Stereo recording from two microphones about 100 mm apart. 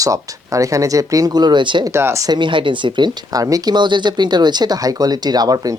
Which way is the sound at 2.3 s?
55° right (ahead or behind).